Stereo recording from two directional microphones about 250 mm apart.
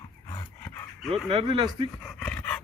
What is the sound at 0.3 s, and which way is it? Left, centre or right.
Dog, centre.